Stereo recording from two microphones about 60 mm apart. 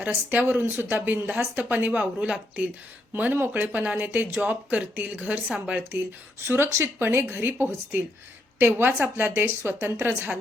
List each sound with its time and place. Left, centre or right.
0.0 s speech: right
3.1 s speech: right
6.4 s a woman's voice: right